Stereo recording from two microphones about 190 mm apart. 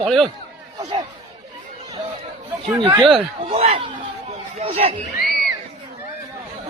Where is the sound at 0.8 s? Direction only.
20° right (ahead or behind).